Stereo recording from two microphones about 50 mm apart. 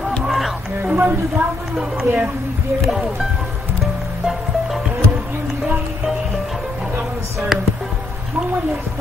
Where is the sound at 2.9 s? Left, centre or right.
Centre.